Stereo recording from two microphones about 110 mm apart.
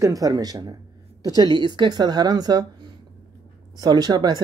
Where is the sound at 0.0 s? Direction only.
35° right (ahead or behind).